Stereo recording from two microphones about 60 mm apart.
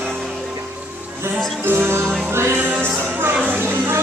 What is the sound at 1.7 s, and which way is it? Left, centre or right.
Music, right.